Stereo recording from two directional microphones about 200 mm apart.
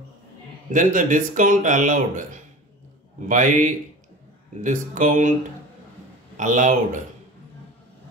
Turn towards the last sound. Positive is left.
turn(degrees=-40)  # may be behind; listen again after turning